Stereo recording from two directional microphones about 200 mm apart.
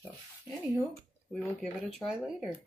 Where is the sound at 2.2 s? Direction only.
5° right (ahead or behind).